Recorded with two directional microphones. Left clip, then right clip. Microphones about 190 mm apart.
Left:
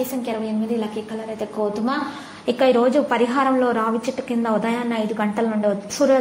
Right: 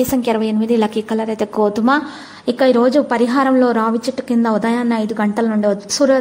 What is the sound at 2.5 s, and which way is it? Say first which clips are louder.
A woman's voice: right 3 dB; 30° right (ahead or behind).